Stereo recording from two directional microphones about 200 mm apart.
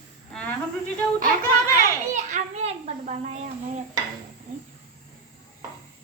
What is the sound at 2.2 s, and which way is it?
A child's voice, 35° right (ahead or behind).